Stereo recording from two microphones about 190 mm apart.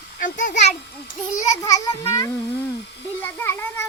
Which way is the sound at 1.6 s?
15° left (ahead or behind).